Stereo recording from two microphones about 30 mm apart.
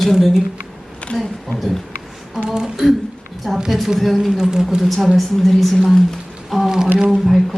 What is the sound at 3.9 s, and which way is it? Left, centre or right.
Speech, centre.